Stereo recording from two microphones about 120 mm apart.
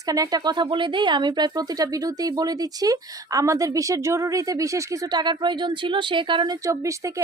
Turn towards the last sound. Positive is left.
turn(degrees=-25)  # may be behind; listen again after turning